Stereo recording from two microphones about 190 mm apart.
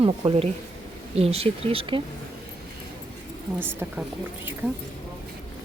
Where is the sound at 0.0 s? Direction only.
25° right (ahead or behind).